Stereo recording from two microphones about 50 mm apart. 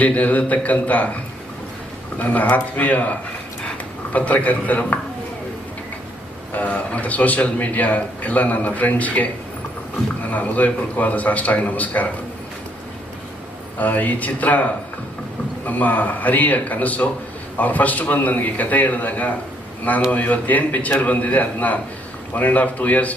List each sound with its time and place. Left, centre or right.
0.0 s a man's voice: left
2.1 s a man's voice: left
4.1 s a man's voice: left
6.5 s a man's voice: left
13.7 s a man's voice: left
15.6 s a man's voice: left